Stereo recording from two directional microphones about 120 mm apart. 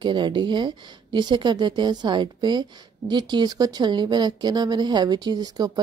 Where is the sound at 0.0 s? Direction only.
40° right (ahead or behind).